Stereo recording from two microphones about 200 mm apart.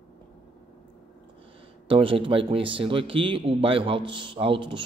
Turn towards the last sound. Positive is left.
turn(degrees=-25)  # may be behind; listen again after turning